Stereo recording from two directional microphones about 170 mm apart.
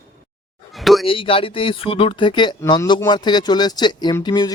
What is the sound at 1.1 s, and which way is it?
A man's voice, 30° left (ahead or behind).